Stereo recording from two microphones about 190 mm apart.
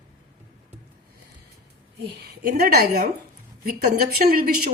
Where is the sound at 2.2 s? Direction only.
55° right (ahead or behind).